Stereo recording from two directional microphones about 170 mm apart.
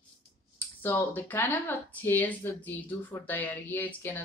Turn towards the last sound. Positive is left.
turn(degrees=10)  # may be behind; listen again after turning